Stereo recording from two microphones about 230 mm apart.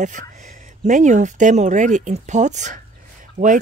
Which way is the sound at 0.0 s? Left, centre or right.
Right.